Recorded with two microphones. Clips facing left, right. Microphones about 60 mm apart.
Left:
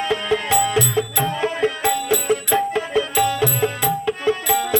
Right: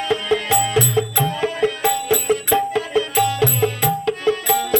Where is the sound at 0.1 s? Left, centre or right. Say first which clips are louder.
Right 2 dB; centre.